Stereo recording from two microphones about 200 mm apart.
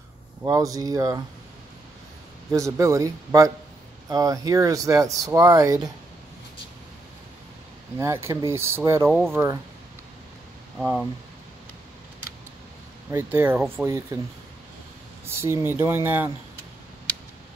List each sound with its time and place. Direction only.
0.4 s speech: 15° right (ahead or behind)
2.5 s speech: 15° right (ahead or behind)
8.0 s speech: 15° right (ahead or behind)
10.8 s speech: 5° right (ahead or behind)
13.1 s speech: 10° right (ahead or behind)
15.2 s speech: 15° right (ahead or behind)